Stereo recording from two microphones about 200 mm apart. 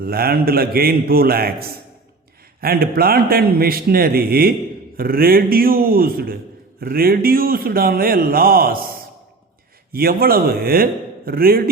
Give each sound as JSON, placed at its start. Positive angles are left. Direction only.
{"t": 0.0, "sound": "a man's voice", "side_deg": -50}
{"t": 9.9, "sound": "a man's voice", "side_deg": -50}